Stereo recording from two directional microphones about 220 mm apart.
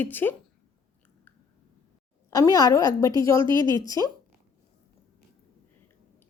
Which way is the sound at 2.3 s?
15° left (ahead or behind).